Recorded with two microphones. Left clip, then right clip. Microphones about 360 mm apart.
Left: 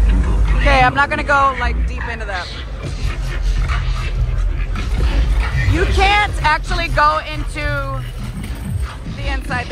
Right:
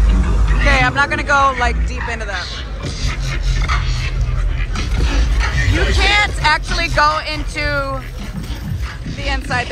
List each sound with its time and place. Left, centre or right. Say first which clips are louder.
0.5 s speech: left 2 dB; centre
3.6 s music: right 5 dB; centre
4.7 s a sound: right 3 dB; right
5.9 s speech: left 1 dB; centre
9.2 s speech: right 3 dB; centre